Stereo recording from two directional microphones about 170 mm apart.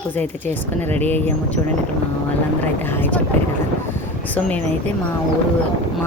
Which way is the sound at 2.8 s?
10° left (ahead or behind).